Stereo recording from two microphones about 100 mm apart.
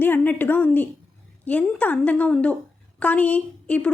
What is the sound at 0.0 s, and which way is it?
A woman's voice, 20° left (ahead or behind).